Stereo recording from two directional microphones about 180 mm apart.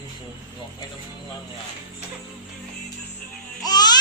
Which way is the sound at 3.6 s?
20° left (ahead or behind).